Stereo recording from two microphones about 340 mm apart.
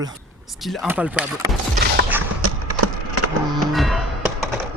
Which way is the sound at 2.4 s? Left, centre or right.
Right.